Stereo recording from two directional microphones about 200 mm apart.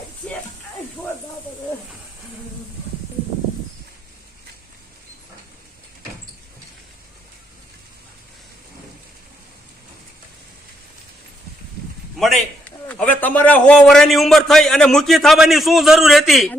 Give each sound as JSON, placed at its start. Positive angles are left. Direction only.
{"t": 12.2, "sound": "a man's voice", "side_deg": 5}